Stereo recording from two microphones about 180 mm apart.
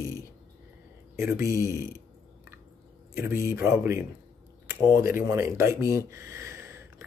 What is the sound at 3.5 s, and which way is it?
Speech, 15° right (ahead or behind).